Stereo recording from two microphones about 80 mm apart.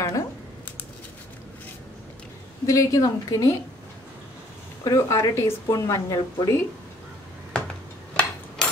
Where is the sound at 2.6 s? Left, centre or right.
Left.